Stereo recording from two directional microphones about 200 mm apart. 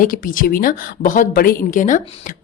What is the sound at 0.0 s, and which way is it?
A woman's voice, 45° left (ahead or behind).